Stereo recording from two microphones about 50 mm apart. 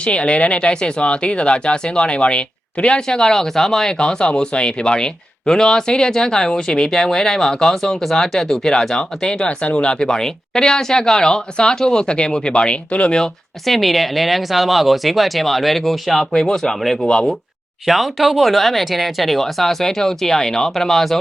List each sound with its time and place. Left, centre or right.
0.0 s speech: left
13.7 s speech: centre
16.3 s speech: centre
16.6 s speech: centre